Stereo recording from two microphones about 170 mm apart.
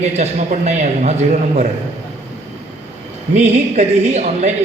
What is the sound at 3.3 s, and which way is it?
A man's voice, 40° right (ahead or behind).